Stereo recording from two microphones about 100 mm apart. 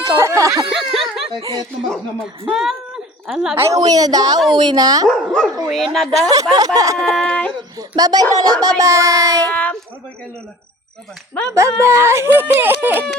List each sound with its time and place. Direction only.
0.0 s a sound: 30° right (ahead or behind)
0.5 s snicker: centre (ahead or behind)
1.4 s speech: 40° right (ahead or behind)
2.5 s speech: 5° right (ahead or behind)
3.6 s speech: 35° right (ahead or behind)
5.0 s speech: 5° left (ahead or behind)
6.1 s speech: 40° right (ahead or behind)
7.1 s speech: 10° left (ahead or behind)
7.8 s speech: 40° right (ahead or behind)
9.5 s speech: 15° left (ahead or behind)
11.5 s speech: 30° right (ahead or behind)